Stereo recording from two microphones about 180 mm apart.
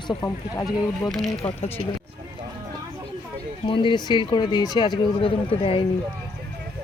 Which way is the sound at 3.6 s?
25° left (ahead or behind).